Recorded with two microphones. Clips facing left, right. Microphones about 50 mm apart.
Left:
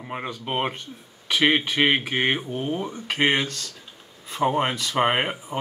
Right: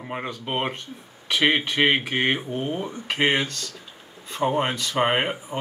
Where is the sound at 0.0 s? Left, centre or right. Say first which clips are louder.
Even; centre.